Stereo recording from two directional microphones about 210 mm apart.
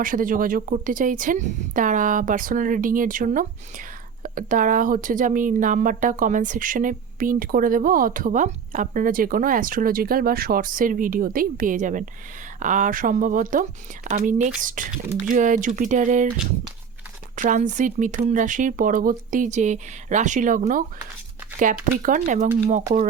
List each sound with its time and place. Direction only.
0.0 s speech: 40° right (ahead or behind)
17.3 s speech: 40° right (ahead or behind)